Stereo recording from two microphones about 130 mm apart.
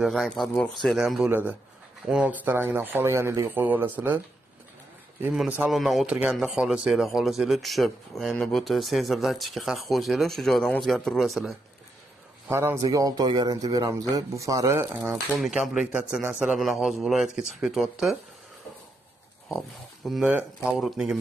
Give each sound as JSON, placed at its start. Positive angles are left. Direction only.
{"t": 0.0, "sound": "speech", "side_deg": 0}
{"t": 5.3, "sound": "speech", "side_deg": -5}
{"t": 12.4, "sound": "speech", "side_deg": -20}
{"t": 12.8, "sound": "speech", "side_deg": -30}
{"t": 15.3, "sound": "speech", "side_deg": 0}
{"t": 16.5, "sound": "speech", "side_deg": 0}
{"t": 20.1, "sound": "speech", "side_deg": 0}